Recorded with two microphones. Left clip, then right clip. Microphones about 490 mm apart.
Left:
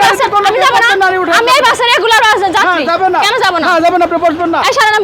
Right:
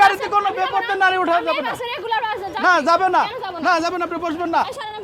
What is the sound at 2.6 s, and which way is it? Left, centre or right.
Speech, right.